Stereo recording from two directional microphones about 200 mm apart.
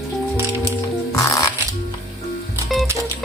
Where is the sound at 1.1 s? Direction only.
15° left (ahead or behind).